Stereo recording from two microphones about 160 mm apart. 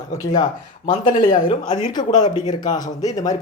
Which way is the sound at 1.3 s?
25° left (ahead or behind).